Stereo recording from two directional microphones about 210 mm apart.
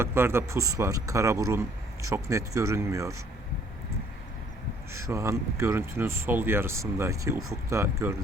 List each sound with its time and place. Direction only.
0.0 s speech: 10° right (ahead or behind)
4.9 s speech: 15° right (ahead or behind)